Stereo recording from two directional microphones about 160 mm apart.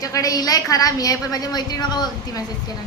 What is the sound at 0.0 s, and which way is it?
A woman's voice, 20° left (ahead or behind).